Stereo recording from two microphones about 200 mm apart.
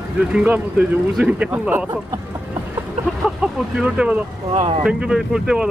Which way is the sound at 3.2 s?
5° right (ahead or behind).